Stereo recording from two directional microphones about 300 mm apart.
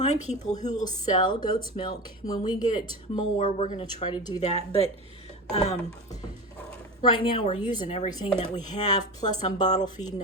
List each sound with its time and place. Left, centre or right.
0.0 s a woman's voice: left